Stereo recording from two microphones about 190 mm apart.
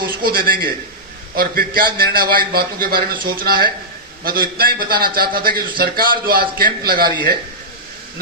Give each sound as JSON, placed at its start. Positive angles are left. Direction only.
{"t": 0.0, "sound": "a man's voice", "side_deg": -50}